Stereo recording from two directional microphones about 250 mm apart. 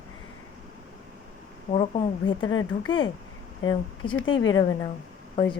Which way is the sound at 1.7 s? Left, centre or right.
Centre.